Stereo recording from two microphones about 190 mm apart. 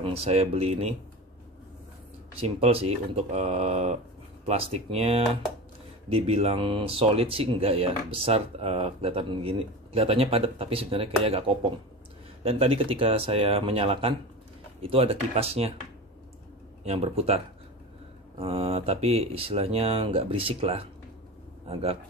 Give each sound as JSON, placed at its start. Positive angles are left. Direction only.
{"t": 0.0, "sound": "speech", "side_deg": -30}
{"t": 2.3, "sound": "speech", "side_deg": -30}
{"t": 16.8, "sound": "speech", "side_deg": -35}
{"t": 18.4, "sound": "speech", "side_deg": -30}